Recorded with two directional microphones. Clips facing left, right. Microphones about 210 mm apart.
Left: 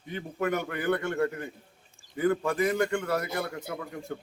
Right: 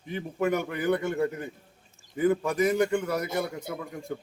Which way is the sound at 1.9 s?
20° right (ahead or behind).